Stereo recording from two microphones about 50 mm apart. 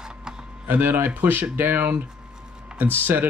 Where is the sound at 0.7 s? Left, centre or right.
Right.